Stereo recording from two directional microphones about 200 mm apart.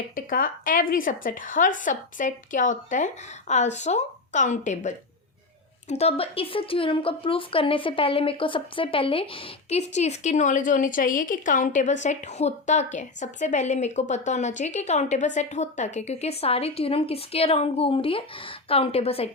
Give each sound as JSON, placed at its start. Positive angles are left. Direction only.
{"t": 0.3, "sound": "a woman's voice", "side_deg": 45}